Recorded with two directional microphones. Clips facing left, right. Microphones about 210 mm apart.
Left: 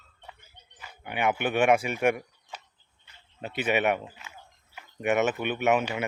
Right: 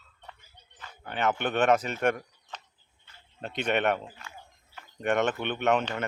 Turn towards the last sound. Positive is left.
turn(degrees=10)  # may be behind; listen again after turning